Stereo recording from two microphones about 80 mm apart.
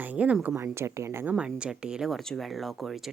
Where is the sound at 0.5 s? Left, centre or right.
Right.